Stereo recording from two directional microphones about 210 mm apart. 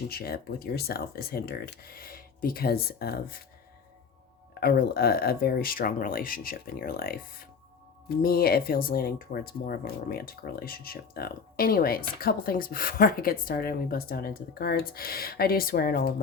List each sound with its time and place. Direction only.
0.1 s speech: 45° left (ahead or behind)
4.6 s speech: 45° left (ahead or behind)